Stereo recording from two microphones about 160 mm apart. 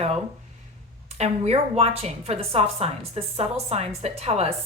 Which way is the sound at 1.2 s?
40° right (ahead or behind).